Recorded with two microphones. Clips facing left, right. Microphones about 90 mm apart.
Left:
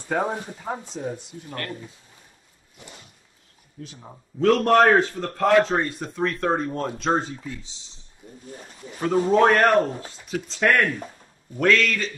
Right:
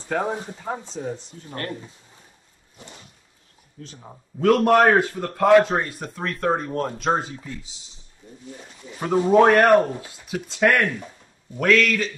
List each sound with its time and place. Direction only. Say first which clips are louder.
0.1 s speech: even; 10° left (ahead or behind)
1.5 s speech: right 2 dB; 30° right (ahead or behind)
3.8 s speech: left 1 dB; 5° left (ahead or behind)
4.4 s a man's voice: right 1 dB; 10° right (ahead or behind)
9.3 s a man's voice: right 3 dB; 5° right (ahead or behind)